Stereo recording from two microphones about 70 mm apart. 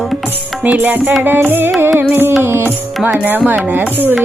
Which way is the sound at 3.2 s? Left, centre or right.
Right.